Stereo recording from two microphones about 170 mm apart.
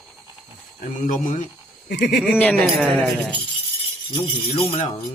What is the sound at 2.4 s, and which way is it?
Speech, 5° left (ahead or behind).